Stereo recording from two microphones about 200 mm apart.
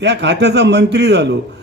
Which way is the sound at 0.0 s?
60° right (ahead or behind).